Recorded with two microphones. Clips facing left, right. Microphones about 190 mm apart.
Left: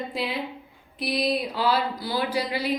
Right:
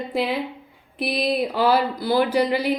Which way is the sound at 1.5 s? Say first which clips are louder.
Right 5 dB; 60° right (ahead or behind).